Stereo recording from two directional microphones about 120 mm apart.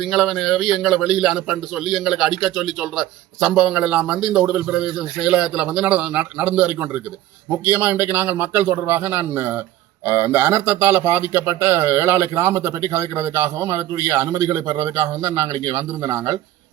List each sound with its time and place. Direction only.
0.0 s a man's voice: centre (ahead or behind)
7.7 s a man's voice: 15° right (ahead or behind)